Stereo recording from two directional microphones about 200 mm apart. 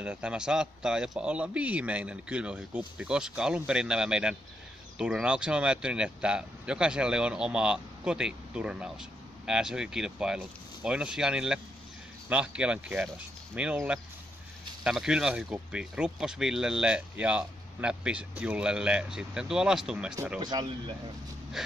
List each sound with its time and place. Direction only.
0.0 s speech: 5° right (ahead or behind)
20.3 s speech: 20° right (ahead or behind)
21.6 s speech: 5° right (ahead or behind)